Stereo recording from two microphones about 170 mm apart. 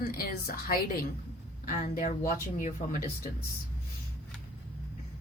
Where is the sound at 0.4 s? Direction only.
60° left (ahead or behind).